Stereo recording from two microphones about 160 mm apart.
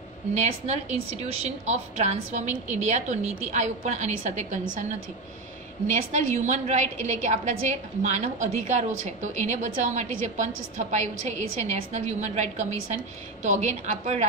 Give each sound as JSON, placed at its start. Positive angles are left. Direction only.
{"t": 0.3, "sound": "a woman's voice", "side_deg": -45}
{"t": 5.9, "sound": "a woman's voice", "side_deg": -50}